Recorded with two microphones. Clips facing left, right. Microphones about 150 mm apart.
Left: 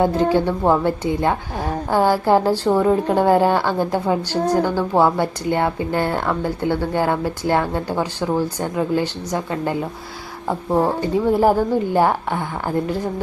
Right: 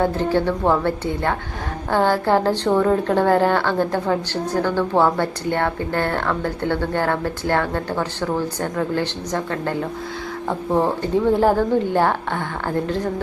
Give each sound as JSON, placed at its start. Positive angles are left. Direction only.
{"t": 0.0, "sound": "a woman's voice", "side_deg": 15}